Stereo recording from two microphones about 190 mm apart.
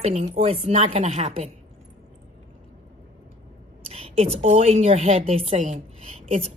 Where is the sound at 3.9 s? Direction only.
30° right (ahead or behind).